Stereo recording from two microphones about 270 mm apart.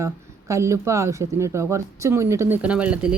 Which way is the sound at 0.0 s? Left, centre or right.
Centre.